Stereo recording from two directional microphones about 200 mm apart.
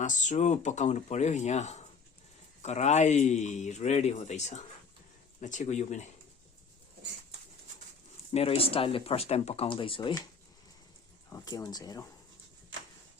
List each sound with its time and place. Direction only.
0.0 s a man's voice: 40° left (ahead or behind)
8.3 s speech: 30° left (ahead or behind)
11.3 s speech: 20° left (ahead or behind)